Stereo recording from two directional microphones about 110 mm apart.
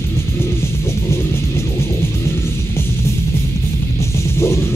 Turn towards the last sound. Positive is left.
turn(degrees=25)  # may be behind; listen again after turning